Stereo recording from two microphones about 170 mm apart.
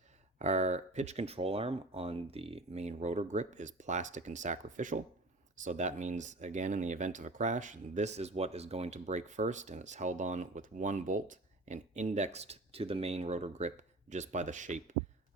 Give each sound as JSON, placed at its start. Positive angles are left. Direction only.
{"t": 0.3, "sound": "speech", "side_deg": -40}